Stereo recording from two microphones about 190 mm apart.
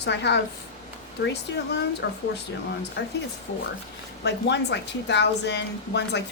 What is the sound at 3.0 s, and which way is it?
Speech, 60° left (ahead or behind).